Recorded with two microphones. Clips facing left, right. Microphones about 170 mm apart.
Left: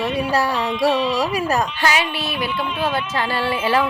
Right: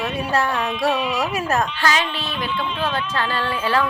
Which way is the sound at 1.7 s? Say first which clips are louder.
Left 1 dB; 15° left (ahead or behind).